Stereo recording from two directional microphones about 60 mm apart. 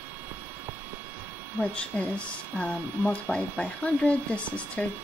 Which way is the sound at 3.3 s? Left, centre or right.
Centre.